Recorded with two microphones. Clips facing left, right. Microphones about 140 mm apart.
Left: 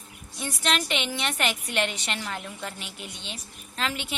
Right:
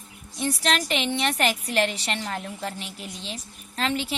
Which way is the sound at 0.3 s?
35° right (ahead or behind).